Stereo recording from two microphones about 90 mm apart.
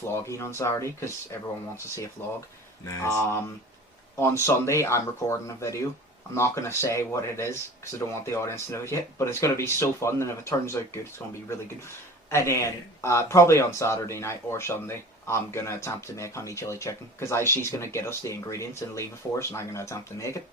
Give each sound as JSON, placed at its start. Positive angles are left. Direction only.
{"t": 0.1, "sound": "speech", "side_deg": 30}
{"t": 4.4, "sound": "speech", "side_deg": 30}
{"t": 12.3, "sound": "speech", "side_deg": 30}